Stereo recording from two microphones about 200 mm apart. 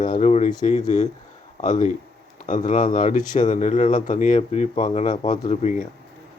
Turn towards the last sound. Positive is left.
turn(degrees=35)  # may be behind; listen again after turning